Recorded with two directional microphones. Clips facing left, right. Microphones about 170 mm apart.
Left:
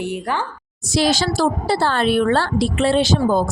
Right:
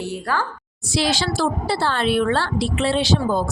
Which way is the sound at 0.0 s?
20° left (ahead or behind).